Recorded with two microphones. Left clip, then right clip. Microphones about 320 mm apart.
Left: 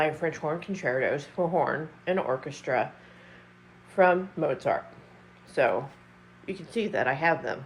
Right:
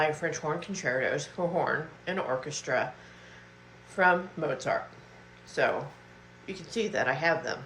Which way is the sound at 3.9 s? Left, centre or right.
Left.